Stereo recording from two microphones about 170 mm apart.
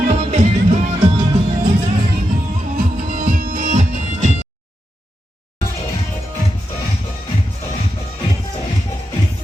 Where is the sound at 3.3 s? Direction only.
55° right (ahead or behind).